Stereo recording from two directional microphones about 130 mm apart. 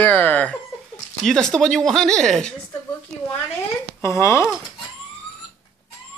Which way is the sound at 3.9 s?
20° left (ahead or behind).